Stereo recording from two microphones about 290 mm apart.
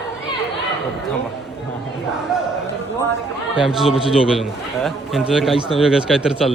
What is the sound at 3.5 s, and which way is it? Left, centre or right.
A man's voice, centre.